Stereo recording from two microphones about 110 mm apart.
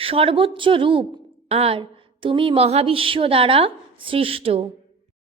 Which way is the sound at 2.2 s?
55° right (ahead or behind).